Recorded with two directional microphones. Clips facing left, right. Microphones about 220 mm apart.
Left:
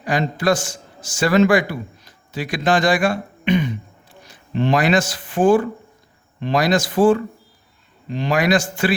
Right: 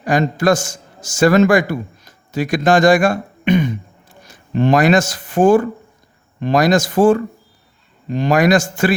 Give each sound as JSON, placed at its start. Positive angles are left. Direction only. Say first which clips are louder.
{"t": 0.0, "sound": "a man's voice", "louder": "right 4 dB", "side_deg": -45}